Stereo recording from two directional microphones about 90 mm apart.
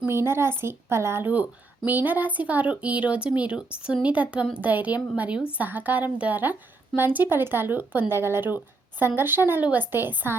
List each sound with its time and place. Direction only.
0.0 s a woman's voice: 30° right (ahead or behind)